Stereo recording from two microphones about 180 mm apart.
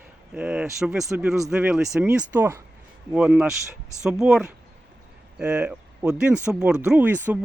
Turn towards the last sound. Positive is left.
turn(degrees=-10)  # may be behind; listen again after turning